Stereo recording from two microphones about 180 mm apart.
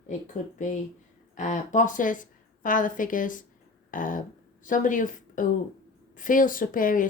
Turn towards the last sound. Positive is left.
turn(degrees=50)  # may be behind; listen again after turning